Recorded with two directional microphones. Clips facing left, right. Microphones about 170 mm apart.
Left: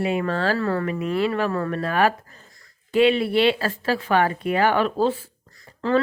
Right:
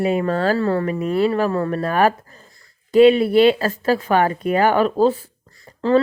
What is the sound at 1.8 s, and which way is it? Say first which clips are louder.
Speech: right 2 dB; 45° right (ahead or behind).